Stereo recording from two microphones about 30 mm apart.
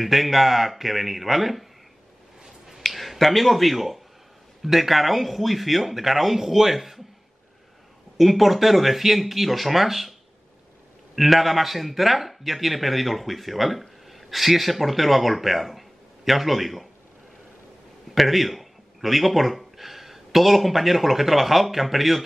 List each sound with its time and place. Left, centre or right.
0.0 s speech: centre
2.4 s finger snapping: centre
2.9 s speech: centre
8.2 s speech: centre
11.1 s speech: centre
18.1 s speech: centre